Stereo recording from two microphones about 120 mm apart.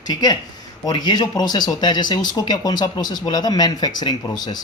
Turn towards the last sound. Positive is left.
turn(degrees=35)  # may be behind; listen again after turning